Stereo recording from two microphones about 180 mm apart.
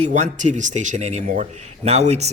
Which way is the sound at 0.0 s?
40° right (ahead or behind).